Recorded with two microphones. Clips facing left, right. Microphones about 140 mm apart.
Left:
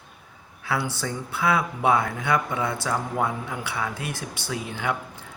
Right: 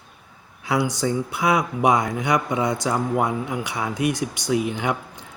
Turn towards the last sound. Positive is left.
turn(degrees=-20)  # may be behind; listen again after turning